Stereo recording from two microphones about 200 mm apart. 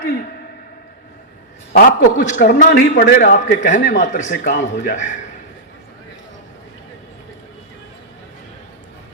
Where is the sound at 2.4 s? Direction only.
40° left (ahead or behind).